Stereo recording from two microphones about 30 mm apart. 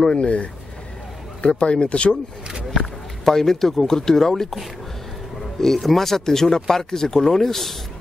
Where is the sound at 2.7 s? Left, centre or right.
Centre.